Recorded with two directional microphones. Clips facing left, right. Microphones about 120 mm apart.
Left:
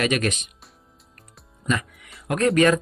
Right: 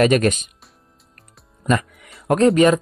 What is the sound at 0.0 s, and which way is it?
Speech, 40° right (ahead or behind).